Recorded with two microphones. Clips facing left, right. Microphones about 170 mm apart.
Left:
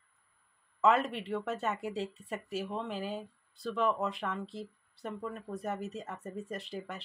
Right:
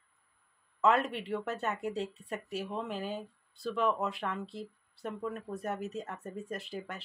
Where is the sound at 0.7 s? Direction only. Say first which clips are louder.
Even; centre (ahead or behind).